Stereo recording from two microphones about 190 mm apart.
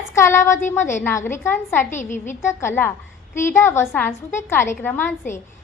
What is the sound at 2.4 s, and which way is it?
A woman's voice, 10° left (ahead or behind).